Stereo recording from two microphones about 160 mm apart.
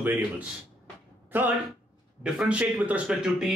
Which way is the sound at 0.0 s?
10° right (ahead or behind).